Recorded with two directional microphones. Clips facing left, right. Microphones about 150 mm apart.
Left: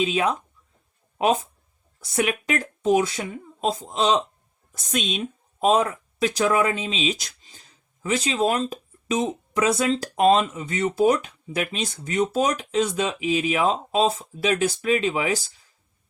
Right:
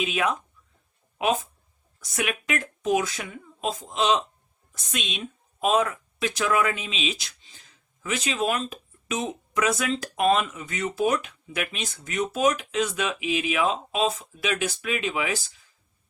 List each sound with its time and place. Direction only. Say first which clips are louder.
0.0 s speech: left 3 dB; 35° left (ahead or behind)